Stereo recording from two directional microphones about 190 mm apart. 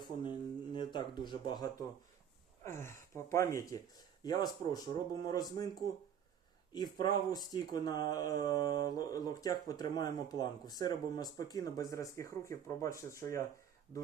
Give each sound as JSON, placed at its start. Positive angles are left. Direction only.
{"t": 0.0, "sound": "speech", "side_deg": 25}
{"t": 2.6, "sound": "speech", "side_deg": 15}
{"t": 6.7, "sound": "speech", "side_deg": 20}